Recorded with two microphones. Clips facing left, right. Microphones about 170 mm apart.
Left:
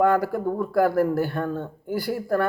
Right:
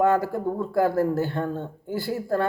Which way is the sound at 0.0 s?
25° right (ahead or behind).